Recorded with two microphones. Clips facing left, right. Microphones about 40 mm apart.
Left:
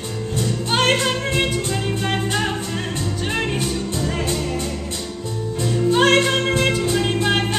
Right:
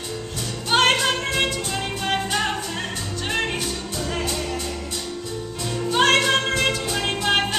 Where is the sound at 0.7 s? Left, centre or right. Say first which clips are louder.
Right 1 dB; centre.